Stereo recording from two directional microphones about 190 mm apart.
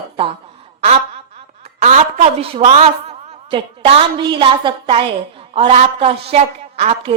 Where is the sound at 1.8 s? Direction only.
40° right (ahead or behind).